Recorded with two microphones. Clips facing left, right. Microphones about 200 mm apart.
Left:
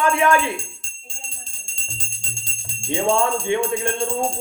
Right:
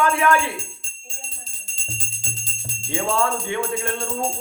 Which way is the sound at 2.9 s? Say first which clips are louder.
Left 3 dB; 20° left (ahead or behind).